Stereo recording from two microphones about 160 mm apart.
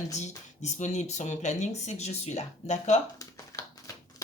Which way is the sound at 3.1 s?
20° left (ahead or behind).